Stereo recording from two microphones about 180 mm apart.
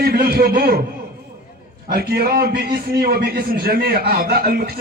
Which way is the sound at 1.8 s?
60° right (ahead or behind).